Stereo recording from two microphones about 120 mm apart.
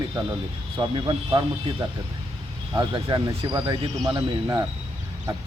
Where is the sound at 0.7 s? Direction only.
40° right (ahead or behind).